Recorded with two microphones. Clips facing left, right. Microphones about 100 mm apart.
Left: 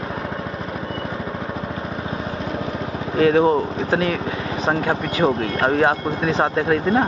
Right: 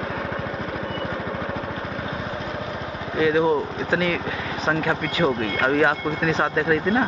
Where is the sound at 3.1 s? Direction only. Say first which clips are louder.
Left 4 dB; 45° left (ahead or behind).